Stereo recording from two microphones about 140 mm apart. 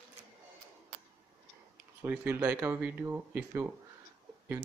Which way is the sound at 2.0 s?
15° right (ahead or behind).